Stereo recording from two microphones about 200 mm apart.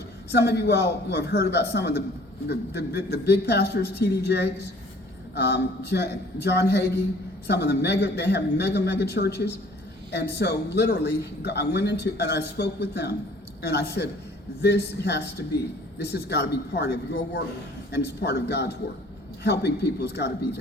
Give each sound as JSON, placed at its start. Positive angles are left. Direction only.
{"t": 0.3, "sound": "a man's voice", "side_deg": 55}